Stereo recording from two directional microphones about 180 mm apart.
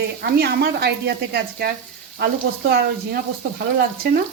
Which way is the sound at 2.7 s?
60° right (ahead or behind).